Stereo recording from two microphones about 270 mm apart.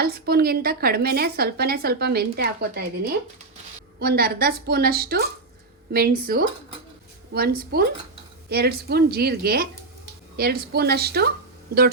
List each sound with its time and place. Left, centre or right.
0.0 s a woman's voice: right
4.0 s a woman's voice: right